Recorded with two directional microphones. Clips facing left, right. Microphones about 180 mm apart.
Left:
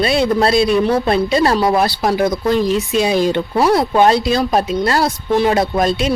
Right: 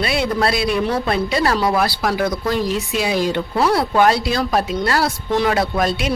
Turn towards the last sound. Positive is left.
turn(degrees=25)  # may be behind; listen again after turning